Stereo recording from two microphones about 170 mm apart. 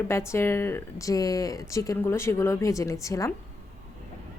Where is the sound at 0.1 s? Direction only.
15° left (ahead or behind).